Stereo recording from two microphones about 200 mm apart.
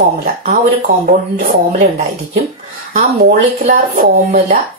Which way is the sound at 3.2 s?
45° right (ahead or behind).